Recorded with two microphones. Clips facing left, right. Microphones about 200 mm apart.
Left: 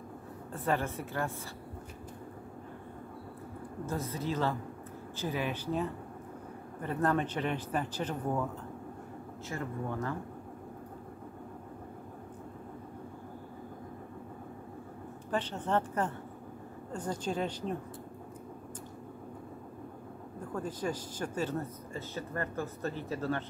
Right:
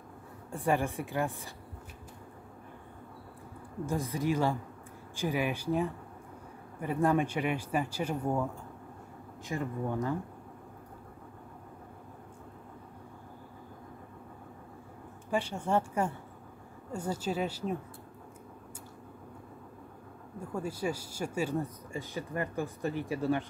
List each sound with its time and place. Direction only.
0.5 s speech: 15° right (ahead or behind)
3.8 s speech: 15° right (ahead or behind)
9.5 s speech: 15° right (ahead or behind)
15.3 s speech: 10° right (ahead or behind)
20.3 s speech: 10° right (ahead or behind)